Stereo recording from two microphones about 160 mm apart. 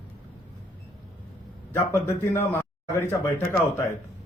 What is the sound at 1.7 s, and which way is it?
Speech, 15° left (ahead or behind).